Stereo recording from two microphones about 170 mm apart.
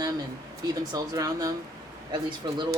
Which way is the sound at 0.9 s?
20° right (ahead or behind).